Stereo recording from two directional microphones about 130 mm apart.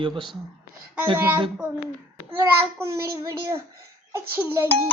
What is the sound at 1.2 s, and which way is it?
A child's voice, 15° right (ahead or behind).